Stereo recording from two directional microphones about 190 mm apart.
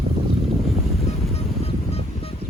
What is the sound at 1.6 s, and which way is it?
Music, 30° left (ahead or behind).